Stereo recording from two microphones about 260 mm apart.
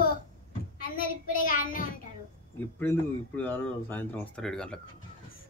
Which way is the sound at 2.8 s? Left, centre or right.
Centre.